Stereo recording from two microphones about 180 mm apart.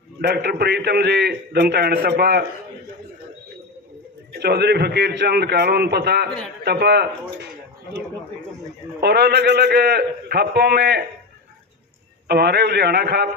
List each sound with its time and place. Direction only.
0.2 s a man's voice: 65° right (ahead or behind)
4.3 s a man's voice: 65° right (ahead or behind)
9.0 s a man's voice: 65° right (ahead or behind)
12.3 s a man's voice: 65° right (ahead or behind)